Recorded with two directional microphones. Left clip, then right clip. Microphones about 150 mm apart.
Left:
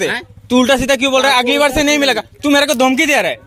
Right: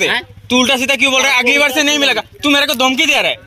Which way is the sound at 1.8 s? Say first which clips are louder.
Even; 40° left (ahead or behind).